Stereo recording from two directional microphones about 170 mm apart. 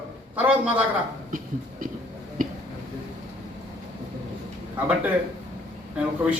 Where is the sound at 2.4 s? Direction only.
55° right (ahead or behind).